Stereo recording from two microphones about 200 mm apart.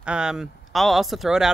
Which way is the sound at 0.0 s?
5° right (ahead or behind).